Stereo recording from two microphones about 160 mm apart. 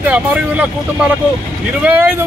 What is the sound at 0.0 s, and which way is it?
Speech, 10° right (ahead or behind).